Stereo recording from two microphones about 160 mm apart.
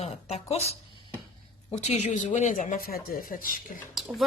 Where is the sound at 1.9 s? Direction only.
50° left (ahead or behind).